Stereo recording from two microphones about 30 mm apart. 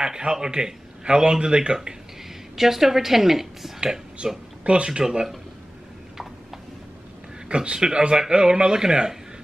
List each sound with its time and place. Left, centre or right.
0.0 s speech: right
2.5 s a woman's voice: centre
3.8 s speech: right
7.4 s a man's voice: right